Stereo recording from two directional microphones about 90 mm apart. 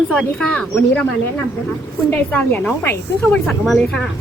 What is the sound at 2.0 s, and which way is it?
Speech, 20° left (ahead or behind).